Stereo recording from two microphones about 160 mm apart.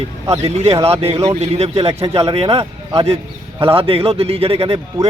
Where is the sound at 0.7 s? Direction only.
40° right (ahead or behind).